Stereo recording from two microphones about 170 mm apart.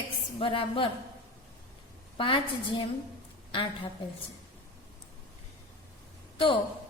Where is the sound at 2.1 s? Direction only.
30° left (ahead or behind).